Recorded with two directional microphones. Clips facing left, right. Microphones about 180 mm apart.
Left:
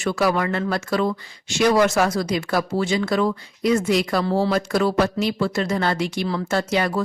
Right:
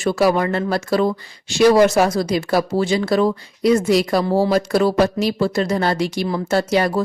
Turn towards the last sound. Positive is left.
turn(degrees=-35)  # may be behind; listen again after turning